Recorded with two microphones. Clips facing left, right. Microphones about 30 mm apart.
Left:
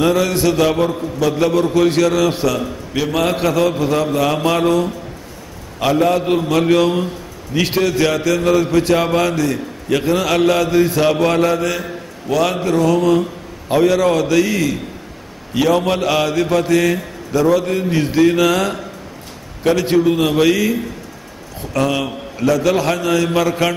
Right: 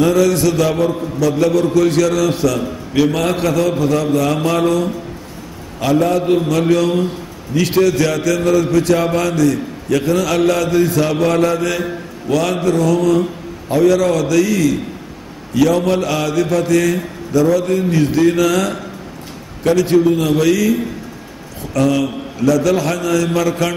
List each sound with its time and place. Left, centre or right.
0.0 s a man's voice: centre
2.9 s a man's voice: centre; by 11.3 s left
11.3 s mantra: centre
12.3 s a man's voice: centre
12.6 s a man's voice: left
21.7 s a man's voice: left